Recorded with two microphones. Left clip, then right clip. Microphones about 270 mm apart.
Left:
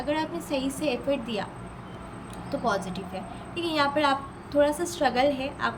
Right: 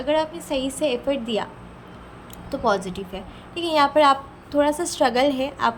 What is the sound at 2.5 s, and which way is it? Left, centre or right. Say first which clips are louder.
A woman's voice: right 5 dB; centre.